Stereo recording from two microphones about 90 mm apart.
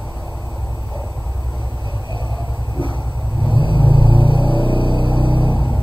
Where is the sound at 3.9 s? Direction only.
65° right (ahead or behind).